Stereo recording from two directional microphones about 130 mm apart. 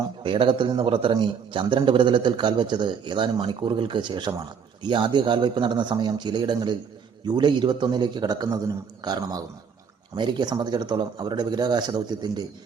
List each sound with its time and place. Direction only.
0.2 s a man's voice: 40° right (ahead or behind)